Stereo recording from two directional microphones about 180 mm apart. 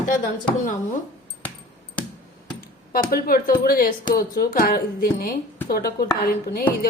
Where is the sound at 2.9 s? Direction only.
55° left (ahead or behind).